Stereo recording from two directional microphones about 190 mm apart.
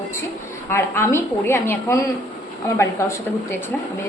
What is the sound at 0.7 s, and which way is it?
A woman's voice, 15° left (ahead or behind).